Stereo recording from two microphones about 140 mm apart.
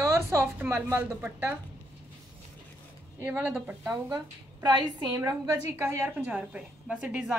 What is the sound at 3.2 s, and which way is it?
Speech, 10° right (ahead or behind).